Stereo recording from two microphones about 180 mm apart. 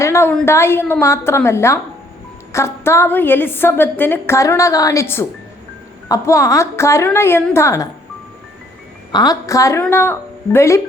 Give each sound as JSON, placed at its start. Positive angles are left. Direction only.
{"t": 0.0, "sound": "a woman's voice", "side_deg": 15}
{"t": 9.1, "sound": "a woman's voice", "side_deg": 20}